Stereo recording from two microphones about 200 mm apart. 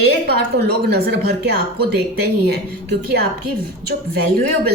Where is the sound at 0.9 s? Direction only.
55° right (ahead or behind).